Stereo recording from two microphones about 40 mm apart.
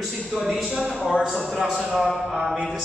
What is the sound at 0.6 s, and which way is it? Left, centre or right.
A man's voice, centre.